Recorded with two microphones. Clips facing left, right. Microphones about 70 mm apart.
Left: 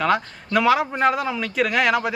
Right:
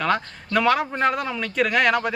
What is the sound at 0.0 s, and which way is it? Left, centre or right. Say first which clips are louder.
A man's voice: left 2 dB; centre.